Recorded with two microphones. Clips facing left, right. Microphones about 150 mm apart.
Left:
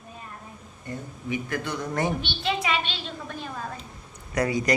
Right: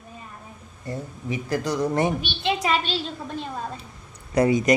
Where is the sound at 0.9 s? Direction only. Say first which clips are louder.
Right 2 dB; 35° right (ahead or behind).